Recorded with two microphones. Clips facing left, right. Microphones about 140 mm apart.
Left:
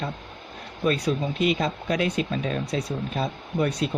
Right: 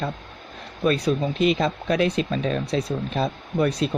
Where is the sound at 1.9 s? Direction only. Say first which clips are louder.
Right 3 dB; 35° right (ahead or behind).